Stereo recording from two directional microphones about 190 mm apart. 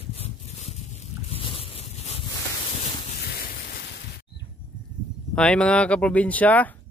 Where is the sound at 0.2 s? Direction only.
35° left (ahead or behind).